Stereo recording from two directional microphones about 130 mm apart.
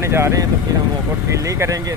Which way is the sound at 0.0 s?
20° right (ahead or behind).